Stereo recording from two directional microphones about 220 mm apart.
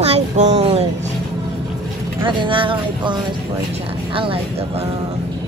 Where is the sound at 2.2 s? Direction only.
20° right (ahead or behind).